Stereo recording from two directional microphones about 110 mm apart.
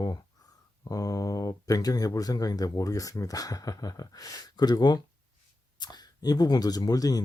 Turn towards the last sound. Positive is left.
turn(degrees=35)  # may be behind; listen again after turning